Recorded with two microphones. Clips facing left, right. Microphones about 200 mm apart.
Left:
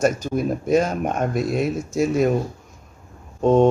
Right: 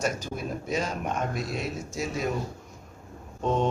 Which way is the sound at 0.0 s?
50° left (ahead or behind).